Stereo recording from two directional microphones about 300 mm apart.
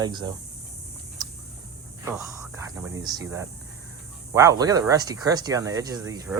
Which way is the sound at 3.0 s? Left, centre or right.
Centre.